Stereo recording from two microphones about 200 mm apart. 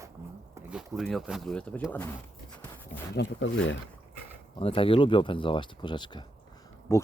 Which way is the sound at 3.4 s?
70° left (ahead or behind).